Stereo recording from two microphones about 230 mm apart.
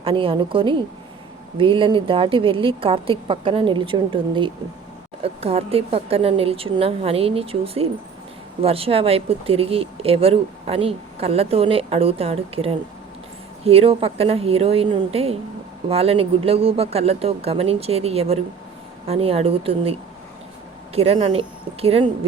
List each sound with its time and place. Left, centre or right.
0.0 s speech: right